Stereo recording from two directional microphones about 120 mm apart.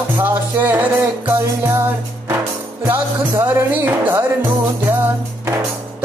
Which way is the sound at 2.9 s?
20° right (ahead or behind).